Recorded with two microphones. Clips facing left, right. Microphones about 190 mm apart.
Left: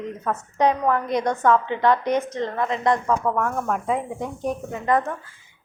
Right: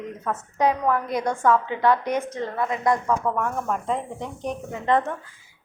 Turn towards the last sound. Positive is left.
turn(degrees=-25)  # may be behind; listen again after turning